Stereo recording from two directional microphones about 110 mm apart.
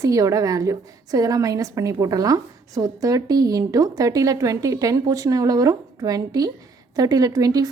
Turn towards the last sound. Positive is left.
turn(degrees=-35)  # may be behind; listen again after turning